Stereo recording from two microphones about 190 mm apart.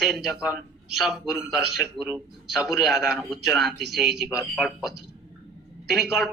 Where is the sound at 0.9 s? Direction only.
Centre (ahead or behind).